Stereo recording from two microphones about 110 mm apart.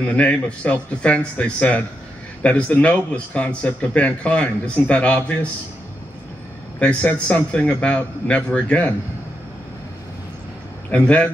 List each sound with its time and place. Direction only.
0.0 s speech: 10° left (ahead or behind)
6.8 s speech: 10° left (ahead or behind)
10.9 s speech: 10° left (ahead or behind)